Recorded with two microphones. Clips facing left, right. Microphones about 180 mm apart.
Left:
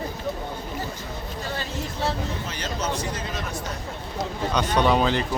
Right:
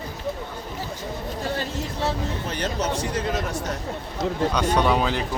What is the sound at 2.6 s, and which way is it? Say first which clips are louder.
Speech: right 3 dB; 65° right (ahead or behind).